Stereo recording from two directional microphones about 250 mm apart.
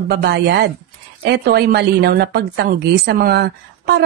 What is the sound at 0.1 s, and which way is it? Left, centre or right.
A woman's voice, right.